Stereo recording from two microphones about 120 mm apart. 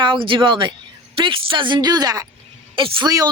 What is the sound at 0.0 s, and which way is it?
Speech, 45° right (ahead or behind).